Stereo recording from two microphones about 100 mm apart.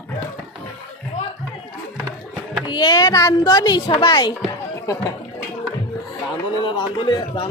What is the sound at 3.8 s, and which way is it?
Speech, 65° left (ahead or behind).